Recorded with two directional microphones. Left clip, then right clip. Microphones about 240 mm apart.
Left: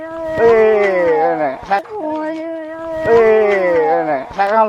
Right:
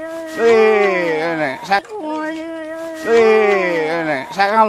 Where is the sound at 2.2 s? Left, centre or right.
Right.